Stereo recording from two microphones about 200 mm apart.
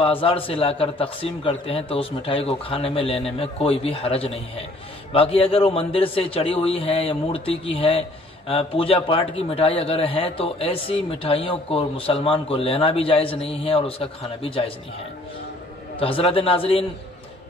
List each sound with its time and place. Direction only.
0.0 s a man's voice: 25° left (ahead or behind)
16.0 s a man's voice: 30° left (ahead or behind)